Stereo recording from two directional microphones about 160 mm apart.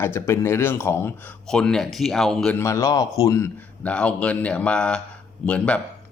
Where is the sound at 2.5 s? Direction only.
20° left (ahead or behind).